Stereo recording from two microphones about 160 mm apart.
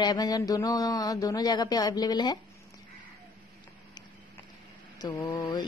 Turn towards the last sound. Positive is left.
turn(degrees=25)  # may be behind; listen again after turning